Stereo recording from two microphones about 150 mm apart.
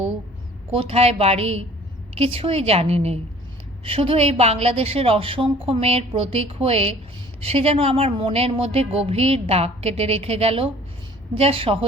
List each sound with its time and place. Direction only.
0.7 s a woman's voice: 40° right (ahead or behind)